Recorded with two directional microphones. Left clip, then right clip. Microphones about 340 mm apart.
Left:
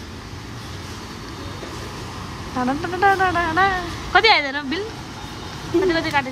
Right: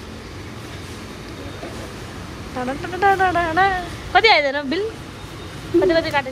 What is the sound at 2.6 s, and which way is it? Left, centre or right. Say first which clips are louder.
Speech: left 1 dB; centre.